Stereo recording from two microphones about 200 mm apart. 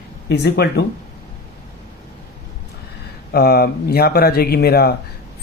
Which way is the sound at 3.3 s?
50° left (ahead or behind).